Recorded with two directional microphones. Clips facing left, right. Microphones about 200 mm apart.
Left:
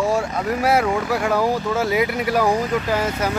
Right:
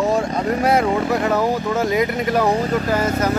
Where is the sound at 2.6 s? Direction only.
40° right (ahead or behind).